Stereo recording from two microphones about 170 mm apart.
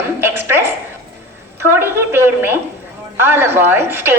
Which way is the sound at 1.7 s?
15° right (ahead or behind).